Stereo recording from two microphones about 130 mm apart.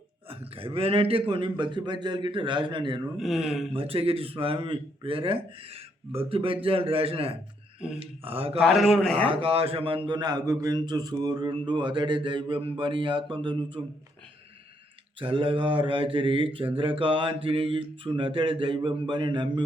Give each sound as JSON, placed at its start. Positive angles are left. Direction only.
{"t": 0.3, "sound": "a man's voice", "side_deg": -45}
{"t": 3.2, "sound": "a man's voice", "side_deg": 0}
{"t": 3.8, "sound": "a man's voice", "side_deg": -45}
{"t": 8.6, "sound": "a man's voice", "side_deg": 5}
{"t": 9.2, "sound": "a man's voice", "side_deg": -45}
{"t": 15.2, "sound": "a man's voice", "side_deg": -40}